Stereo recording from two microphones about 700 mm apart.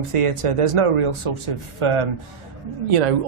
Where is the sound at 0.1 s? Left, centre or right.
Right.